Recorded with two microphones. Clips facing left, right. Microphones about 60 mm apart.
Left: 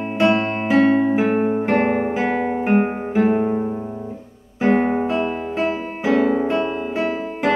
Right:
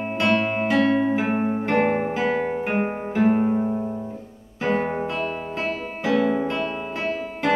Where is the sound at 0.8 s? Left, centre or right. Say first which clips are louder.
Left 5 dB; left.